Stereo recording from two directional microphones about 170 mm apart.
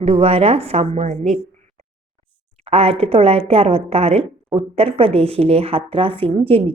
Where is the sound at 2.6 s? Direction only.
35° right (ahead or behind).